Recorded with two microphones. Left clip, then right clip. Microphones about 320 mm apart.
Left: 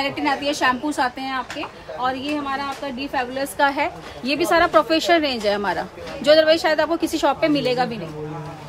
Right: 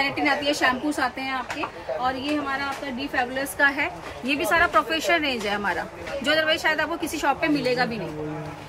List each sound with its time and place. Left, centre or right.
0.0 s a woman's voice: centre
3.7 s a woman's voice: left
7.6 s a woman's voice: centre